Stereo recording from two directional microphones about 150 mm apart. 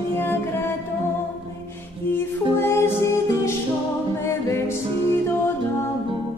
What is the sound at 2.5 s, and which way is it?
Music, 15° left (ahead or behind).